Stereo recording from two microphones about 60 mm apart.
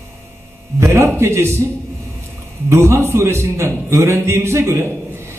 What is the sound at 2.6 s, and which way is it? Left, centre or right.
Speech, right.